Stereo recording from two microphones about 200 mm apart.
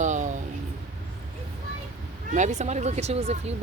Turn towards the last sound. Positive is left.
turn(degrees=-30)  # may be behind; listen again after turning